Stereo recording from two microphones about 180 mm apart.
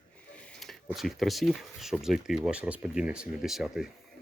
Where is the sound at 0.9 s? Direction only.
Centre (ahead or behind).